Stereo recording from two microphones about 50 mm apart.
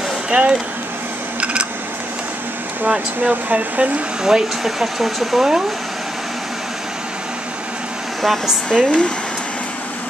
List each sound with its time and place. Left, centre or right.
0.3 s speech: centre
1.4 s a sound: right
2.9 s speech: right
4.2 s speech: centre
8.6 s speech: left